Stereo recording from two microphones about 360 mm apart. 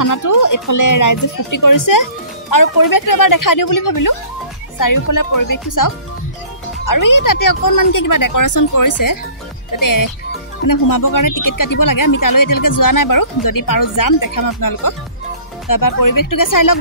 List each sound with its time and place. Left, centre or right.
0.0 s speech: left